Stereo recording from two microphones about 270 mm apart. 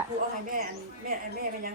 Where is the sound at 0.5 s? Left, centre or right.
Right.